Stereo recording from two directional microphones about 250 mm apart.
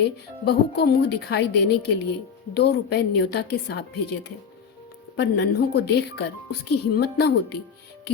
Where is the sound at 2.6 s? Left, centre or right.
Left.